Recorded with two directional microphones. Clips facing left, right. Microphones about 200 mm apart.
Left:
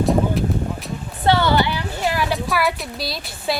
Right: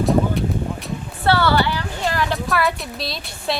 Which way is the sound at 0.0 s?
Centre (ahead or behind).